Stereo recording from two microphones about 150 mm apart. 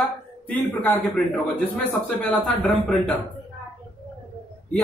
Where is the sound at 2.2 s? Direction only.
5° left (ahead or behind).